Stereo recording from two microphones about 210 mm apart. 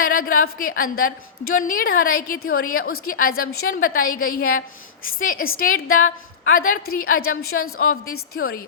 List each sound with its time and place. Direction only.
0.0 s a woman's voice: 45° left (ahead or behind)